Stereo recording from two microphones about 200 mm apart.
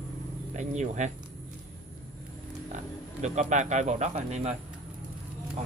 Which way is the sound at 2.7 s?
35° right (ahead or behind).